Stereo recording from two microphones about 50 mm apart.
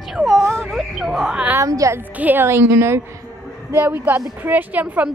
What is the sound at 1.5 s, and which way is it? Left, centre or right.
Speech, right.